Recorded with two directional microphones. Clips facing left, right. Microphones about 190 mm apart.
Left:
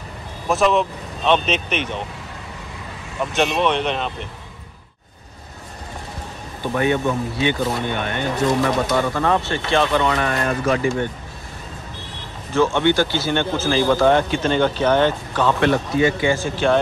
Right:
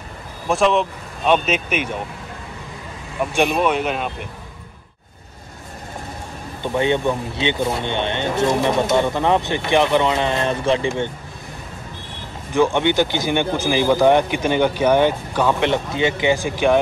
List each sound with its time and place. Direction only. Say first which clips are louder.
0.5 s speech: even; centre (ahead or behind)
1.2 s a man's voice: right 1 dB; 10° right (ahead or behind)
3.2 s a man's voice: right 1 dB; 10° right (ahead or behind)
6.6 s speech: right 1 dB; 20° right (ahead or behind)
12.5 s a man's voice: even; 15° right (ahead or behind)